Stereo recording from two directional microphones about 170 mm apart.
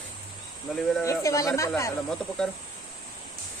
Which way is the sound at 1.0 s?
20° left (ahead or behind).